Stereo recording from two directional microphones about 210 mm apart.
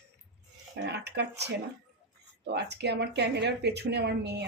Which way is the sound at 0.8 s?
55° right (ahead or behind).